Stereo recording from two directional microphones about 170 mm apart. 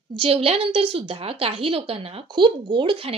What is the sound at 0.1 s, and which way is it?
A woman's voice, 35° right (ahead or behind).